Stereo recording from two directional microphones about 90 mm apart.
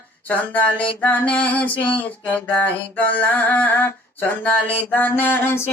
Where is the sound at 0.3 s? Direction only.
20° left (ahead or behind).